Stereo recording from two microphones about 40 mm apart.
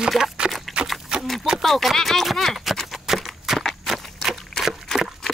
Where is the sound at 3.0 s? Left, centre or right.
Centre.